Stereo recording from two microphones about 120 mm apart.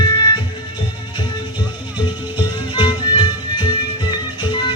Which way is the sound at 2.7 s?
40° left (ahead or behind).